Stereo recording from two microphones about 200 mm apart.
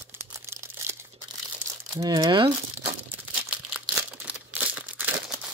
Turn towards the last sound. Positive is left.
turn(degrees=-10)  # may be behind; listen again after turning